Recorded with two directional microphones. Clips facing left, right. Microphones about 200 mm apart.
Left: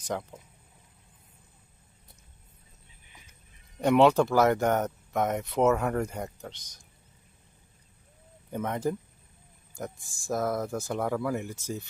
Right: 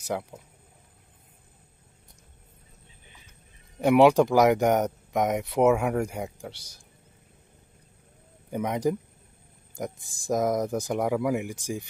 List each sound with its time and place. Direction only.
0.0 s speech: 10° right (ahead or behind)
3.8 s speech: 10° right (ahead or behind)
8.5 s speech: 15° right (ahead or behind)